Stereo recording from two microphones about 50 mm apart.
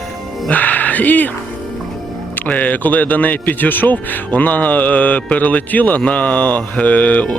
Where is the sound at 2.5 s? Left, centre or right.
Left.